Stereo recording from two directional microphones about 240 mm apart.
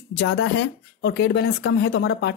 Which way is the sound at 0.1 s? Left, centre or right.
Left.